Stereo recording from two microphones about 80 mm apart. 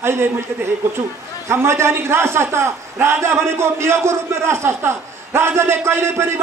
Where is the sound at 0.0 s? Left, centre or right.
Right.